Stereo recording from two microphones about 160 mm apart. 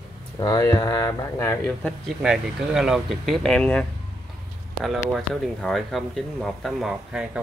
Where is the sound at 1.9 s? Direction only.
Centre (ahead or behind).